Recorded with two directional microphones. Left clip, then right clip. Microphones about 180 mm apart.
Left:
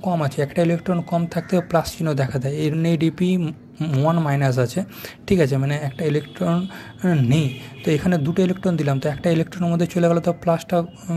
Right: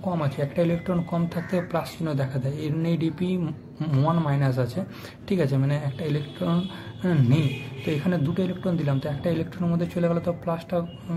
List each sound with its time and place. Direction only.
0.1 s speech: 30° left (ahead or behind)